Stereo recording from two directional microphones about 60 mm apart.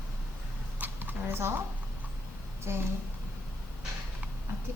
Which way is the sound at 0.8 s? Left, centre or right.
Right.